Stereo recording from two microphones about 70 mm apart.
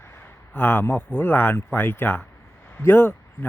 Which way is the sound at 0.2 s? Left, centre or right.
Left.